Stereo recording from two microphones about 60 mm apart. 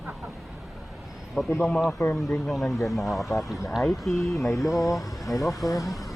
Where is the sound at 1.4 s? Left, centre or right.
Centre.